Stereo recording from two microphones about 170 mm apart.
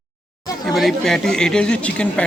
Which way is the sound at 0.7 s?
Centre (ahead or behind).